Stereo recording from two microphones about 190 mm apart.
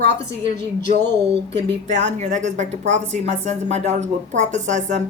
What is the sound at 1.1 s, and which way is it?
Speech, 65° right (ahead or behind).